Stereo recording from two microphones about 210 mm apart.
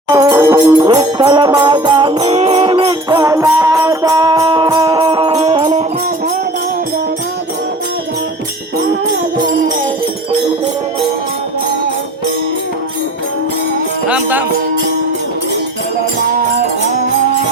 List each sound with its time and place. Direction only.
0.1 s music: 15° right (ahead or behind)
14.1 s music: 10° right (ahead or behind)